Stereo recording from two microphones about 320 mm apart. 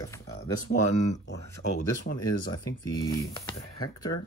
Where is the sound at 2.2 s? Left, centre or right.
Centre.